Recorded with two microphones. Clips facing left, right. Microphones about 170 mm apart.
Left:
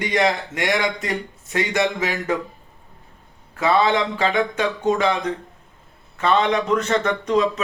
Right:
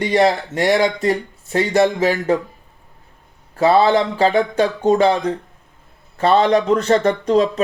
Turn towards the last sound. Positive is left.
turn(degrees=-35)  # may be behind; listen again after turning